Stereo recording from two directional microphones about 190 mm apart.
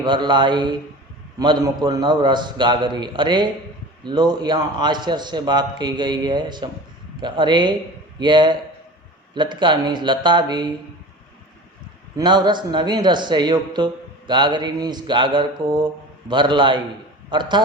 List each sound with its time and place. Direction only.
0.0 s a man's voice: 25° right (ahead or behind)
12.1 s a man's voice: 20° right (ahead or behind)